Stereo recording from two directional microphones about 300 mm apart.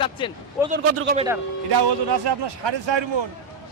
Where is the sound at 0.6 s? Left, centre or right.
Centre.